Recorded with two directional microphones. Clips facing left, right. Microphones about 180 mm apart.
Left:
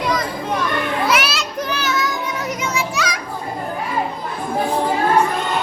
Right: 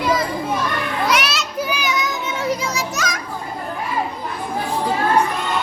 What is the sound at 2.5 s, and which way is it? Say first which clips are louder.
Children playing: right 2 dB; 40° right (ahead or behind).